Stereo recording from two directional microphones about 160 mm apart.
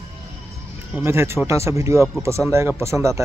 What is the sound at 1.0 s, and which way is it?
Speech, 15° right (ahead or behind).